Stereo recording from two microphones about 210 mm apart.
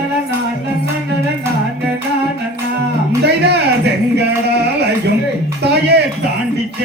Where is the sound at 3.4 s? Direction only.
55° right (ahead or behind).